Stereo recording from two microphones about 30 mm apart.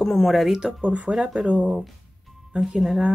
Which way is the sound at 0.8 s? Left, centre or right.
Right.